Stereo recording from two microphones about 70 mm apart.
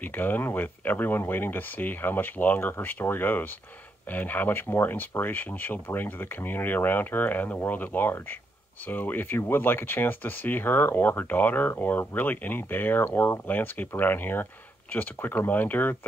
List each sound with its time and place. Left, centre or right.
0.0 s speech: left